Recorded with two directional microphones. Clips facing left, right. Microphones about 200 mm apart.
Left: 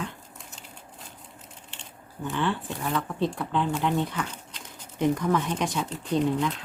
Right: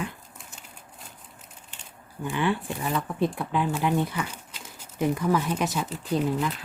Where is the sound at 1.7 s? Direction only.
10° right (ahead or behind).